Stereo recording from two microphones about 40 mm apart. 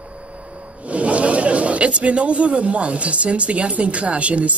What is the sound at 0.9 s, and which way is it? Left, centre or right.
Speech, right.